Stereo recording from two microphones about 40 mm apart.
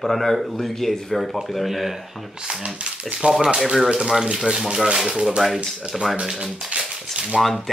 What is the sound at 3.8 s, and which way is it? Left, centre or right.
Speech, centre.